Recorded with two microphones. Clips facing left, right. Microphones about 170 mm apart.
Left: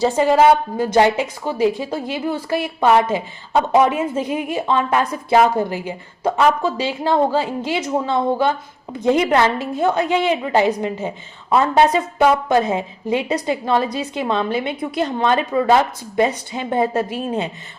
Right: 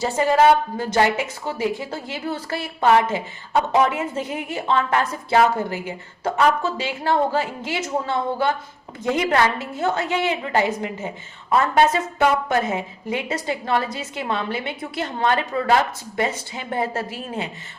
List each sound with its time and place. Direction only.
0.0 s a woman's voice: 15° left (ahead or behind)